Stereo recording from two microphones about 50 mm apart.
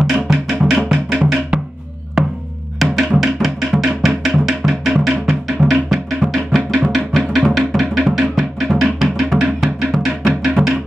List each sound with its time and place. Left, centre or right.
0.3 s music: centre
1.1 s music: right
2.2 s music: centre